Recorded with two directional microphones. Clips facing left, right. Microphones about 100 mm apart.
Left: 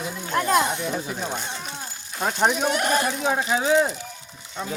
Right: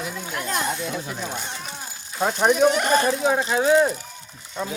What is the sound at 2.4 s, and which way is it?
Speech, 5° left (ahead or behind).